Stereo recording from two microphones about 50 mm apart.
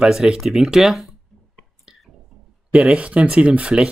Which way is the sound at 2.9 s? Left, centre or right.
Right.